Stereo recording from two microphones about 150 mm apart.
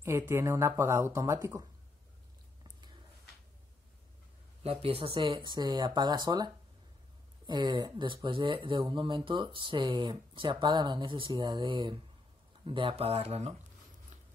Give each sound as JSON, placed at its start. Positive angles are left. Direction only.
{"t": 0.0, "sound": "speech", "side_deg": -15}
{"t": 4.6, "sound": "speech", "side_deg": -40}